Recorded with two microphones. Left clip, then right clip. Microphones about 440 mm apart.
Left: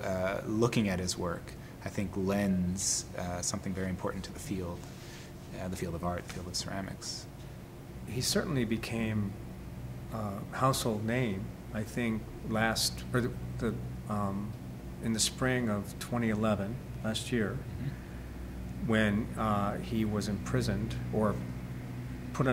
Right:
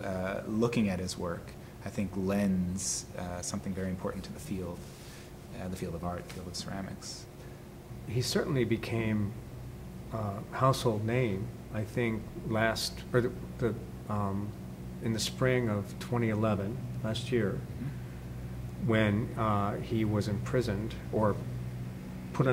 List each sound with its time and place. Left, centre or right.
0.0 s a sound: left
1.9 s speech: left
5.6 s speech: left
8.1 s a man's voice: right
18.9 s speech: right
22.4 s speech: right